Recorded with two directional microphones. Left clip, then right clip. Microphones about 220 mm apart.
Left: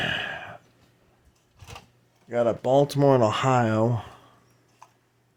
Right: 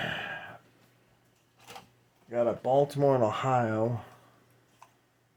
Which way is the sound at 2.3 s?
50° left (ahead or behind).